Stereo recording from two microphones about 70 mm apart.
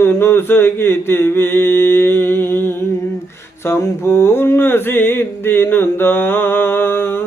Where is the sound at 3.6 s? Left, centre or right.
Left.